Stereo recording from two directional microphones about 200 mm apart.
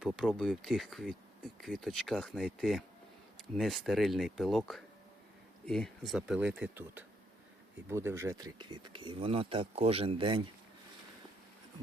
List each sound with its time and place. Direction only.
0.0 s speech: centre (ahead or behind); by 10.5 s 25° right (ahead or behind)